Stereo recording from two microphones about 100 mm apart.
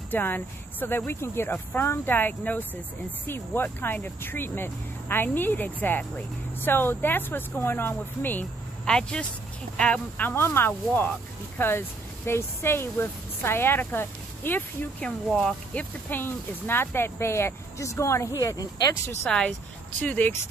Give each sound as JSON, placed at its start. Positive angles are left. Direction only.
{"t": 0.1, "sound": "speech", "side_deg": 20}
{"t": 8.8, "sound": "speech", "side_deg": 5}
{"t": 19.2, "sound": "speech", "side_deg": 5}